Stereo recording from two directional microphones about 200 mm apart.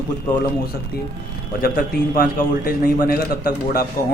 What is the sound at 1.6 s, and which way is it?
Speech, 50° left (ahead or behind).